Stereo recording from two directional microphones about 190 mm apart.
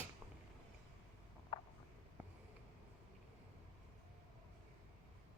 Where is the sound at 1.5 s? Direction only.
20° left (ahead or behind).